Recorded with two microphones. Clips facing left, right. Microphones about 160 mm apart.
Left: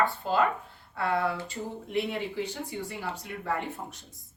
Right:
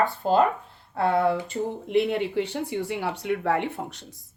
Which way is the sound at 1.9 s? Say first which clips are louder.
Right 7 dB; 65° right (ahead or behind).